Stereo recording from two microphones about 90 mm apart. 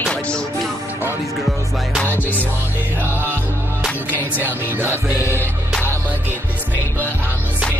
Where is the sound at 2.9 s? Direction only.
20° right (ahead or behind).